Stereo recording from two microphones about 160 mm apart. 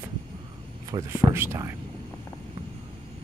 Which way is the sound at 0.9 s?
15° right (ahead or behind).